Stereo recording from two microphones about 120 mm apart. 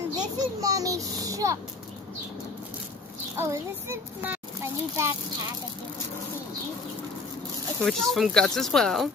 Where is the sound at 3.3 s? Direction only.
20° right (ahead or behind).